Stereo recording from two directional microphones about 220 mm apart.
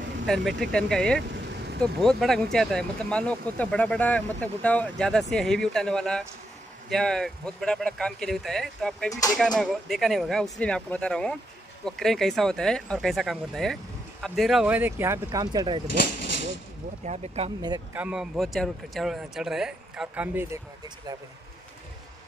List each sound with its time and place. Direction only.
0.3 s speech: centre (ahead or behind); by 15.8 s 20° right (ahead or behind)
17.0 s speech: 30° right (ahead or behind)
17.6 s speech: 15° right (ahead or behind)
18.0 s speech: 5° right (ahead or behind)